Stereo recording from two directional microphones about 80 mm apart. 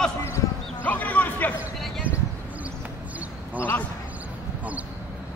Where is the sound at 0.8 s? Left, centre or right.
Centre.